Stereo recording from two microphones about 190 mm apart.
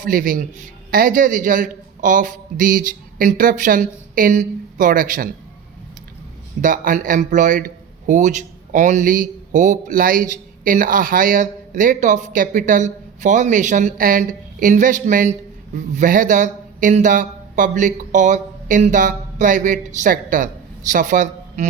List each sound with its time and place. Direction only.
0.0 s a man's voice: 45° right (ahead or behind)
6.6 s a man's voice: 45° right (ahead or behind)